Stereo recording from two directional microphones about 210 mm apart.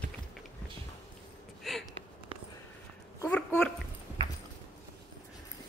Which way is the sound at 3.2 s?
5° left (ahead or behind).